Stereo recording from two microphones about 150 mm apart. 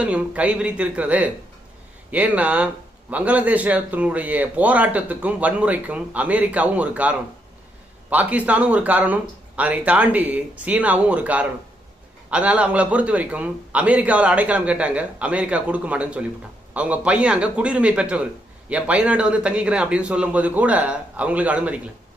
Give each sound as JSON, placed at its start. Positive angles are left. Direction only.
{"t": 0.0, "sound": "a man's voice", "side_deg": -10}